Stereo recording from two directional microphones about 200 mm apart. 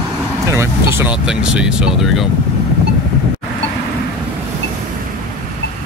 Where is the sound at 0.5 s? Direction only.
10° right (ahead or behind).